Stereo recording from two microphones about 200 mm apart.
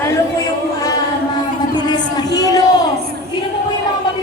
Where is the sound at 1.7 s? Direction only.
20° left (ahead or behind).